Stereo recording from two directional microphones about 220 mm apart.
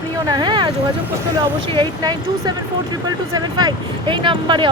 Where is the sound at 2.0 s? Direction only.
15° right (ahead or behind).